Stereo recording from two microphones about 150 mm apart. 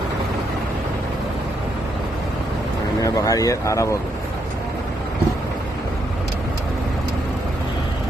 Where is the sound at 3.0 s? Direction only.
20° left (ahead or behind).